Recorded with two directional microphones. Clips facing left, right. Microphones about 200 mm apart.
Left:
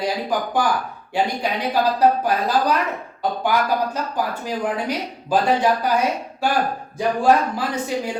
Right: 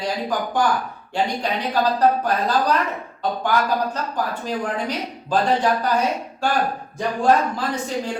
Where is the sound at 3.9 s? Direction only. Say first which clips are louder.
Left 1 dB; 10° left (ahead or behind).